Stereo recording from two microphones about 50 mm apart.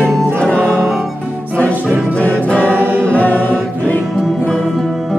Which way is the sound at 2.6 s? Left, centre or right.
Right.